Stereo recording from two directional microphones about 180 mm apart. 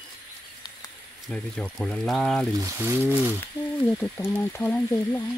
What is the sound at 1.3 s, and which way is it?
Speech, 5° left (ahead or behind).